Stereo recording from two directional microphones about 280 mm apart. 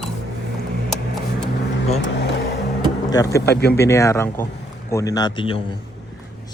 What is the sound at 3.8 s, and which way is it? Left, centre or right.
A man's voice, centre.